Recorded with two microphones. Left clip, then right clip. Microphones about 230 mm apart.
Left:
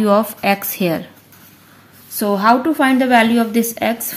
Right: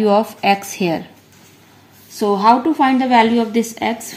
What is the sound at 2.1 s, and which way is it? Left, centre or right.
A woman's voice, left.